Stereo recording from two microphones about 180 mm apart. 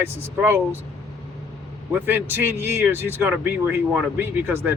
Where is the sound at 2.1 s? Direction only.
10° right (ahead or behind).